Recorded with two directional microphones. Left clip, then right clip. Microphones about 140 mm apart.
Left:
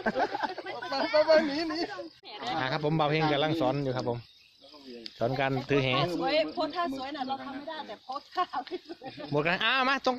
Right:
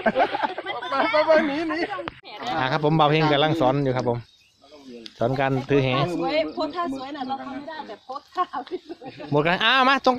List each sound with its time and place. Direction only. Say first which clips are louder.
0.0 s a sound: right 8 dB; 45° right (ahead or behind)
0.6 s a sound: right 7 dB; 20° right (ahead or behind)
1.3 s a man's voice: right 5 dB; centre (ahead or behind)
2.2 s speech: right 6 dB; 25° right (ahead or behind)
6.2 s speech: right 4 dB; 60° left (ahead or behind)
9.3 s speech: right 7 dB; 25° right (ahead or behind)